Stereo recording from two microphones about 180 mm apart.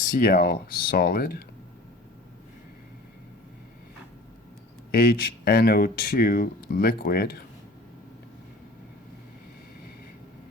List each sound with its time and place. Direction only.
0.1 s speech: 55° left (ahead or behind)
4.9 s speech: 55° left (ahead or behind)